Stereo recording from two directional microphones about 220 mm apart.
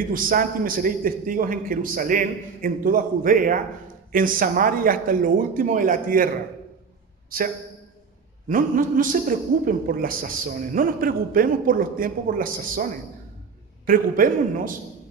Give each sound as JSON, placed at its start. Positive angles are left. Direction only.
{"t": 0.1, "sound": "a man's voice", "side_deg": -40}